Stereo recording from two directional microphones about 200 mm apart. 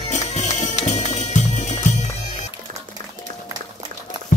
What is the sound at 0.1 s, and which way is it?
Music, 35° left (ahead or behind).